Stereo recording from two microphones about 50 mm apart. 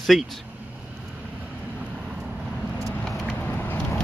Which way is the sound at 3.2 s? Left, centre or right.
Left.